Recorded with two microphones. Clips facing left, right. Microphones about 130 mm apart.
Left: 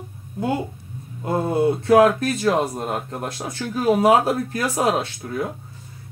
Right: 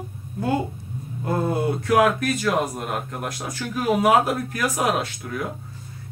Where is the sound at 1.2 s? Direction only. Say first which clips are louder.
Left 3 dB; 25° left (ahead or behind).